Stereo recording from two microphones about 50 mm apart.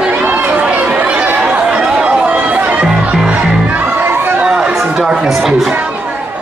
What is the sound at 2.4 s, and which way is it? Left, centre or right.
Music, right.